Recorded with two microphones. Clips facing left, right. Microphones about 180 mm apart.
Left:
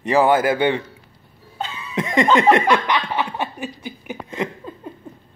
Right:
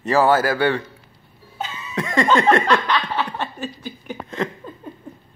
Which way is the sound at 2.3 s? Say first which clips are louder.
Left 1 dB; 15° left (ahead or behind).